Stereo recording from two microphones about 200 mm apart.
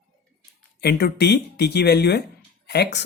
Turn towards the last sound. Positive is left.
turn(degrees=55)  # may be behind; listen again after turning